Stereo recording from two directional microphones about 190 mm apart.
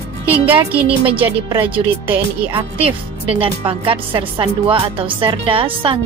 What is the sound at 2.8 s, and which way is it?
Speech, 30° right (ahead or behind).